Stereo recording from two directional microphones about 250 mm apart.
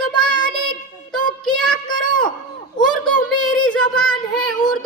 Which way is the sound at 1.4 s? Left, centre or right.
Centre.